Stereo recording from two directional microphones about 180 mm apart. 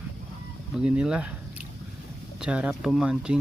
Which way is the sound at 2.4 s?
5° right (ahead or behind).